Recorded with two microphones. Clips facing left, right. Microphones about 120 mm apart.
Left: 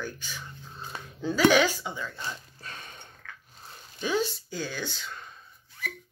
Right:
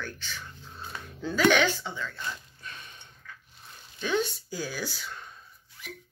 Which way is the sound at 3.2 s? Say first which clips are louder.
Even; 75° left (ahead or behind).